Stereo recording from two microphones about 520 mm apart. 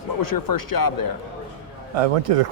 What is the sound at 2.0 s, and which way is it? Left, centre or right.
Speech, right.